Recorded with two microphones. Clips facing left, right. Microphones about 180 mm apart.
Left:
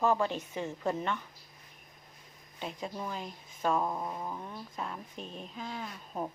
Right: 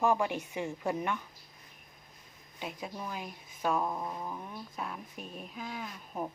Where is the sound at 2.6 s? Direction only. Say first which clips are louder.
Left 2 dB; 10° right (ahead or behind).